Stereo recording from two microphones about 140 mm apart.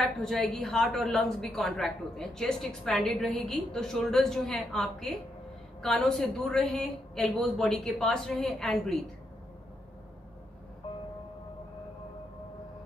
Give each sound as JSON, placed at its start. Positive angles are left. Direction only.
{"t": 0.0, "sound": "a woman's voice", "side_deg": 5}